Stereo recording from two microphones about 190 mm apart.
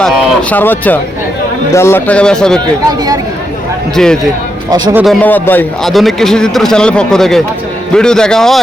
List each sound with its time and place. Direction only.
0.5 s speech: 10° left (ahead or behind)
3.9 s a man's voice: 5° left (ahead or behind)
4.7 s speech: 15° right (ahead or behind)
5.0 s a man's voice: 10° left (ahead or behind)